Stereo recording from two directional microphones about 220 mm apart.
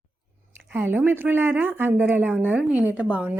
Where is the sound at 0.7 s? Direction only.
10° right (ahead or behind).